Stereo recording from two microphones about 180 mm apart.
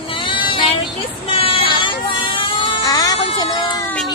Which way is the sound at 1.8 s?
30° left (ahead or behind).